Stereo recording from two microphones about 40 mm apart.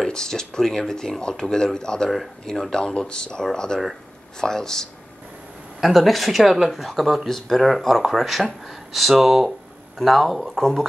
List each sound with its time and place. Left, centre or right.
0.0 s speech: centre
5.8 s speech: centre